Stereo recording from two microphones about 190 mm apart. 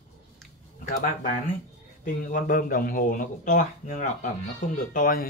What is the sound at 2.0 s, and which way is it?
Speech, 45° left (ahead or behind).